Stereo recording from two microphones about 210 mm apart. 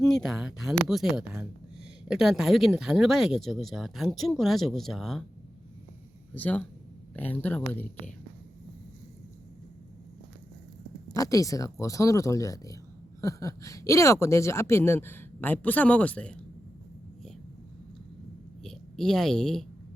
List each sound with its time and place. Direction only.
0.0 s speech: centre (ahead or behind)
6.3 s speech: 5° left (ahead or behind)
11.1 s speech: 15° left (ahead or behind)
18.6 s speech: centre (ahead or behind)